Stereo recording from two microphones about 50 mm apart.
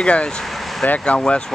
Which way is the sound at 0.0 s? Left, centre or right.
Left.